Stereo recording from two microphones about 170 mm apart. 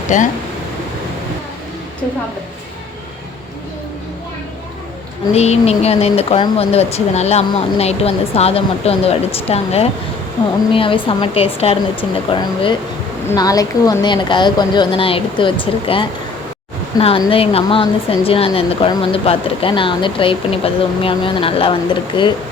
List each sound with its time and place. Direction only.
0.1 s speech: 45° left (ahead or behind)
5.3 s speech: 40° left (ahead or behind)